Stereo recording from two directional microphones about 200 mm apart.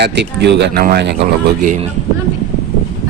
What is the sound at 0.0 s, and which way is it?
Speech, 60° right (ahead or behind).